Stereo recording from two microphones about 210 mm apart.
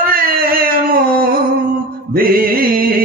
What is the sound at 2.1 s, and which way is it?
Music, 45° right (ahead or behind).